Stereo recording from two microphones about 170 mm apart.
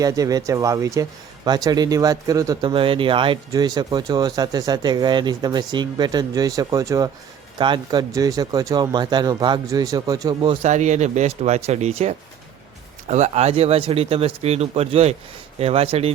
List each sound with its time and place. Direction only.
0.0 s speech: 20° right (ahead or behind)
10.6 s speech: 45° right (ahead or behind)